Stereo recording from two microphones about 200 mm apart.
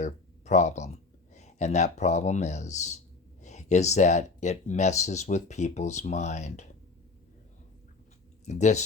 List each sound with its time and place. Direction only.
0.0 s a sound: 35° left (ahead or behind)
1.3 s speech: 35° left (ahead or behind)
8.4 s speech: 35° left (ahead or behind)